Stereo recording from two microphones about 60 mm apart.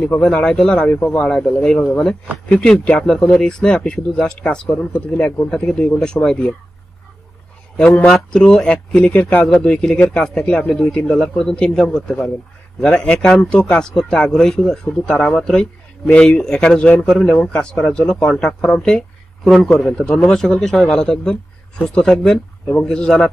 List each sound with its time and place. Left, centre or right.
0.2 s speech: centre
4.7 s speech: left
5.5 s speech: centre
8.0 s a man's voice: centre
19.8 s speech: centre